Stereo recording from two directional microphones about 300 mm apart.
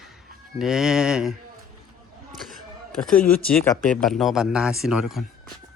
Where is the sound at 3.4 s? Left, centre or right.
Centre.